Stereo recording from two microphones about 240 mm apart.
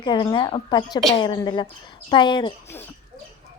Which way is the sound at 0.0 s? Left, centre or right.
Centre.